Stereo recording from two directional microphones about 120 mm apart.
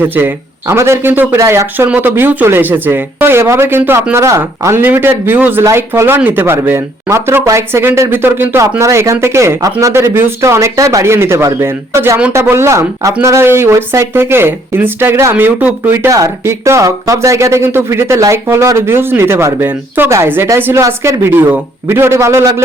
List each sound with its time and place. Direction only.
0.0 s speech: 15° right (ahead or behind)